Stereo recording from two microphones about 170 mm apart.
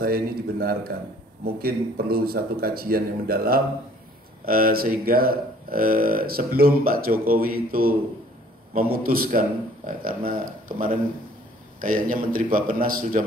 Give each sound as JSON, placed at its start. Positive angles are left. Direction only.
{"t": 0.0, "sound": "speech", "side_deg": -60}